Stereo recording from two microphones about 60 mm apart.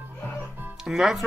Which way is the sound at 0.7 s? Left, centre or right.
Centre.